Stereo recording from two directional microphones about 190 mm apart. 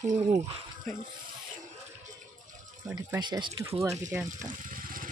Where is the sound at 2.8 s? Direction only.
20° right (ahead or behind).